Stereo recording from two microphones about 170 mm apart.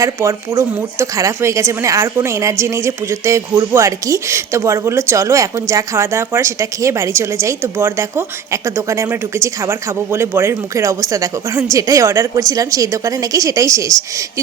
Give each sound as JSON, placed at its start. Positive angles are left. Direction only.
{"t": 0.0, "sound": "a woman's voice", "side_deg": -15}